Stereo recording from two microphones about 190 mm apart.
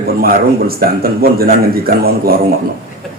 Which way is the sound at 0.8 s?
50° right (ahead or behind).